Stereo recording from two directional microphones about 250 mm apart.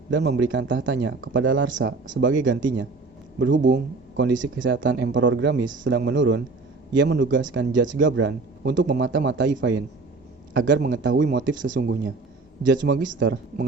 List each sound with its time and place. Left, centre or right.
0.1 s a man's voice: right